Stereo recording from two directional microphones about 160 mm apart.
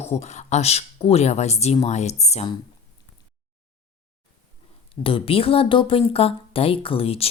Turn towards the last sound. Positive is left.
turn(degrees=35)  # may be behind; listen again after turning